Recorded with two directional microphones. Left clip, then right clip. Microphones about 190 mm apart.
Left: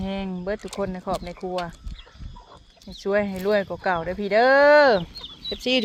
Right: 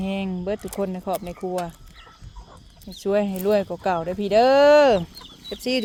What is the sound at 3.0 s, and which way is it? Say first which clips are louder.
Speech: right 1 dB; 30° right (ahead or behind).